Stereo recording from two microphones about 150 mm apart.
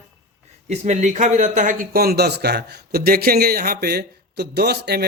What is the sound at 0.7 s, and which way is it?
Speech, 50° right (ahead or behind).